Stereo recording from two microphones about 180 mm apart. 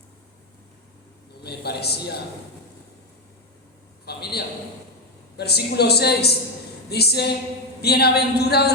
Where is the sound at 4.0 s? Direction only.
65° left (ahead or behind).